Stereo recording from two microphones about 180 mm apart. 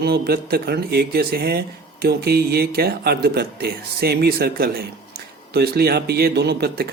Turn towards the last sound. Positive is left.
turn(degrees=-65)  # may be behind; listen again after turning